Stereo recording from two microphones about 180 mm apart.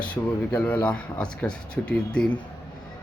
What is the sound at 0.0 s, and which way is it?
A man's voice, 5° left (ahead or behind).